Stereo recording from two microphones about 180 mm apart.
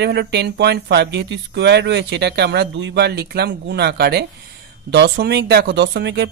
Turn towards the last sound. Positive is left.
turn(degrees=-70)  # may be behind; listen again after turning